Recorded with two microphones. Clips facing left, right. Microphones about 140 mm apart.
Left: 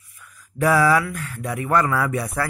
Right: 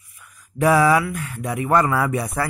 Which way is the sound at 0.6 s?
20° right (ahead or behind).